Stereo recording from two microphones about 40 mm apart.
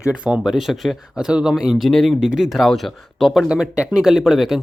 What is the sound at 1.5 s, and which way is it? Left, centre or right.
Speech, centre.